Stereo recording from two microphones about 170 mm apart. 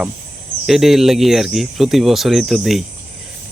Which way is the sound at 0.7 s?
Centre (ahead or behind).